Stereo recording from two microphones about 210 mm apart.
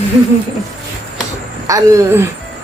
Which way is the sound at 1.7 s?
15° right (ahead or behind).